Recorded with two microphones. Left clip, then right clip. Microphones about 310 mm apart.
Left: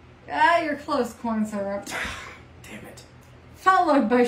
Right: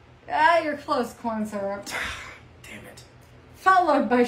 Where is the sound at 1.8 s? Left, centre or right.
Centre.